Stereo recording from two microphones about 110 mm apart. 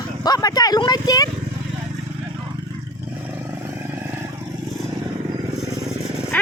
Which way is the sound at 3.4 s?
20° right (ahead or behind).